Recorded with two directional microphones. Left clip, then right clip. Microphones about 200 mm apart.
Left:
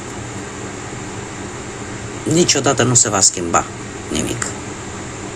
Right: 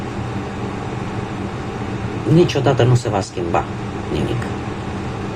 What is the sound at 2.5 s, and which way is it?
Speech, 30° left (ahead or behind).